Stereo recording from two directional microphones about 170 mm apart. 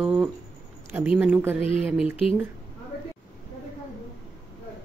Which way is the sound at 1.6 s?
35° left (ahead or behind).